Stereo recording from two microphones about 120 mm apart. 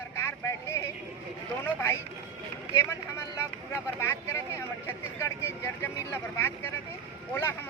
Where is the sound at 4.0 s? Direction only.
20° left (ahead or behind).